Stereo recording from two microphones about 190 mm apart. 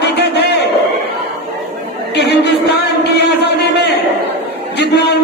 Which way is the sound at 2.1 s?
60° left (ahead or behind).